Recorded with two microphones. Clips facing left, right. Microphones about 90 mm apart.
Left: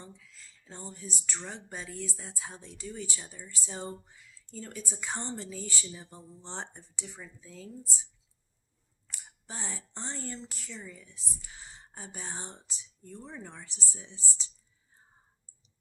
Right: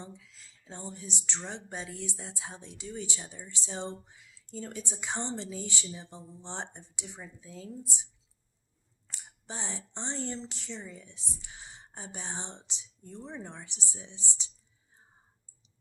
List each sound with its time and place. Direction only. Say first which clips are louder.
0.0 s speech: right 3 dB; 20° right (ahead or behind)
9.5 s speech: right 2 dB; 20° right (ahead or behind)